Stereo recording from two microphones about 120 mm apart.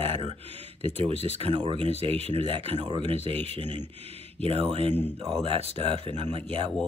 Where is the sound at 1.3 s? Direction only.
50° right (ahead or behind).